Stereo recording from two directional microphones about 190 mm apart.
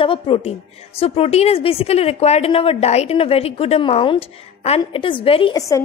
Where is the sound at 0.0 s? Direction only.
30° left (ahead or behind).